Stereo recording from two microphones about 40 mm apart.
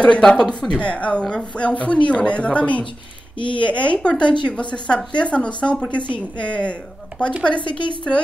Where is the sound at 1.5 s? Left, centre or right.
Left.